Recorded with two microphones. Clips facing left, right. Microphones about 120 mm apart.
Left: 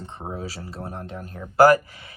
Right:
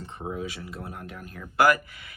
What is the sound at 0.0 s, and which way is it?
Speech, 30° left (ahead or behind).